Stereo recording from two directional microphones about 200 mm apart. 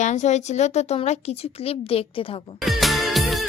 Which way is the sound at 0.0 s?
35° left (ahead or behind).